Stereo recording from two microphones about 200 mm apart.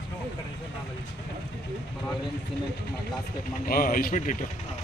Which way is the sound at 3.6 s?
45° left (ahead or behind).